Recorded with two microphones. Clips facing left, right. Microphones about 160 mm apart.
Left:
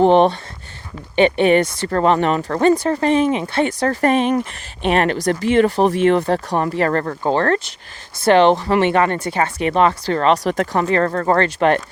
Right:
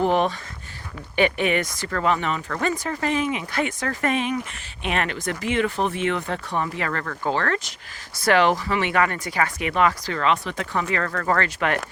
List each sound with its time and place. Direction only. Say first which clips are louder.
0.0 s speech: left 8 dB; 30° left (ahead or behind)